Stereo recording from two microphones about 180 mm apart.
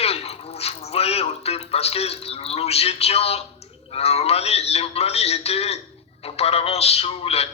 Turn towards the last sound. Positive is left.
turn(degrees=35)  # may be behind; listen again after turning